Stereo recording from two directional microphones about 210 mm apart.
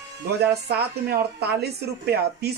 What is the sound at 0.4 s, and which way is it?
Speech, 50° right (ahead or behind).